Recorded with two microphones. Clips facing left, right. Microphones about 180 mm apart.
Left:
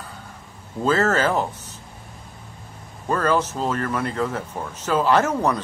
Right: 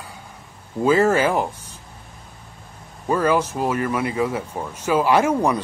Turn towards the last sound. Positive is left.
turn(degrees=-10)  # may be behind; listen again after turning